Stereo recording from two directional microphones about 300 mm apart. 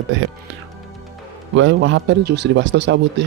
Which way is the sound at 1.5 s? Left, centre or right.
Right.